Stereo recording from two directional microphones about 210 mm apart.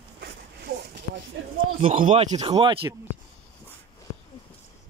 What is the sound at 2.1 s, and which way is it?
Speech, 25° right (ahead or behind).